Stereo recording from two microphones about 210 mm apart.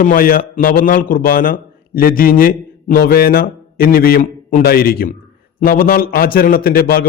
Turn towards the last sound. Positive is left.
turn(degrees=45)  # may be behind; listen again after turning